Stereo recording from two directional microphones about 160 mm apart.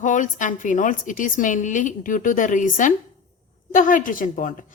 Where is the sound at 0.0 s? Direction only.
55° left (ahead or behind).